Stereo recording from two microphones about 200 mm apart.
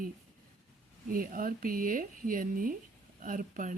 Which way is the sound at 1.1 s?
45° right (ahead or behind).